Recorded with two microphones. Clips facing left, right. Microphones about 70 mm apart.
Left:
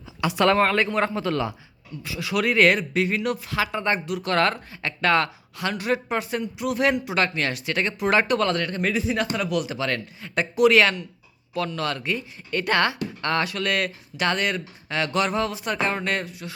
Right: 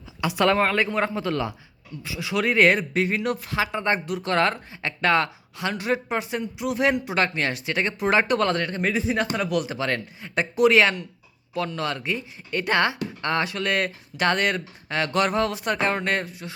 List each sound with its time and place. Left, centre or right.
0.2 s speech: centre
2.0 s speech: centre; by 3.5 s right
3.5 s speech: right
4.0 s speech: right
4.3 s speech: right
7.0 s speech: right